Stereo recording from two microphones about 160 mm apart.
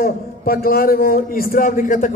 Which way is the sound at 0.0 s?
65° left (ahead or behind).